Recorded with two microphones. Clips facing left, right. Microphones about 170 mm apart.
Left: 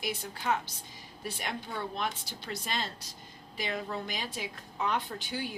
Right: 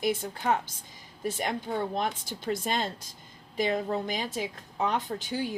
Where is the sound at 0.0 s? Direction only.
50° right (ahead or behind).